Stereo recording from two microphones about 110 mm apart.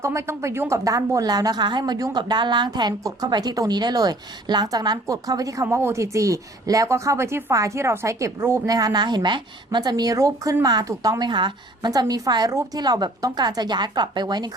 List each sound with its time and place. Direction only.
0.0 s speech: 25° right (ahead or behind)